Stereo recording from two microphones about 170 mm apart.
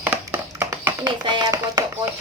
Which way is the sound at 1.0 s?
25° right (ahead or behind).